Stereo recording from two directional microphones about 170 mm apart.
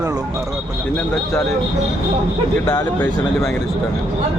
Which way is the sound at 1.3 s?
5° left (ahead or behind).